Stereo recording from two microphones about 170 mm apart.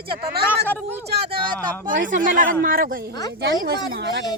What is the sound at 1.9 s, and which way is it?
Speech, 50° right (ahead or behind).